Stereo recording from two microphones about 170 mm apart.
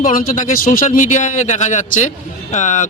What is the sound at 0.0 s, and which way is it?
Speech, 55° left (ahead or behind).